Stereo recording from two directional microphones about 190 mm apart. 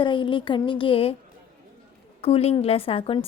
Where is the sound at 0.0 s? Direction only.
25° left (ahead or behind).